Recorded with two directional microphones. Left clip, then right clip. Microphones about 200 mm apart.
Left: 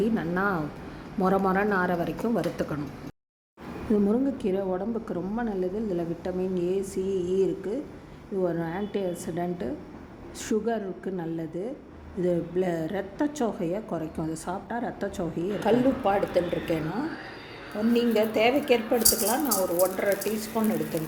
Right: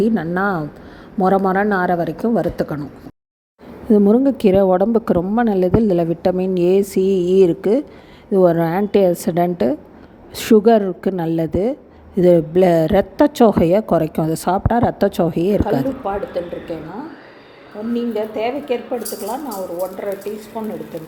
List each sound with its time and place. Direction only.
0.0 s a woman's voice: 30° right (ahead or behind)
3.9 s a woman's voice: 35° right (ahead or behind)
15.6 s speech: 5° left (ahead or behind)
17.9 s speech: 5° left (ahead or behind)